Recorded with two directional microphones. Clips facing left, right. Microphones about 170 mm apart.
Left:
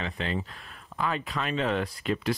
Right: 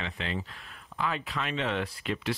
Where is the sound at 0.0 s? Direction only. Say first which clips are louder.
Left 3 dB; 40° left (ahead or behind).